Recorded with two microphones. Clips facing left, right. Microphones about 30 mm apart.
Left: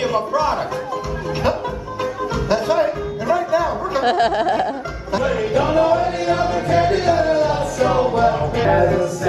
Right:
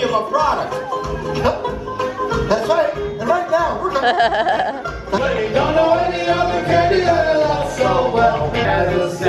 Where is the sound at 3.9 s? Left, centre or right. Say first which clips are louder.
Right 1 dB; centre.